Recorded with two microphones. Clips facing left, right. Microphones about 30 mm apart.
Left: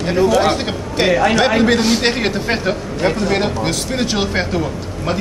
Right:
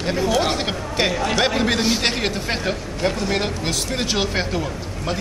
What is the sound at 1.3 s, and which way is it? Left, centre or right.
A man's voice, centre.